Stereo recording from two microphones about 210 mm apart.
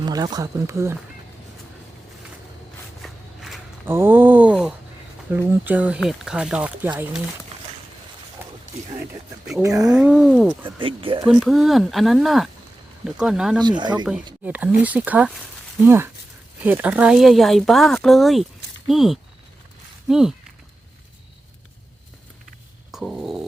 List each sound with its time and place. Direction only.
0.0 s speech: 20° right (ahead or behind)
3.0 s a sound: centre (ahead or behind)
3.8 s a sound: 10° right (ahead or behind)
5.3 s speech: 10° right (ahead or behind)
9.6 s speech: 15° right (ahead or behind)
9.9 s speech: 5° right (ahead or behind)
10.8 s speech: 25° right (ahead or behind)
11.3 s speech: centre (ahead or behind)
13.6 s speech: 20° right (ahead or behind)
14.4 s speech: 5° right (ahead or behind)
22.9 s a sound: centre (ahead or behind)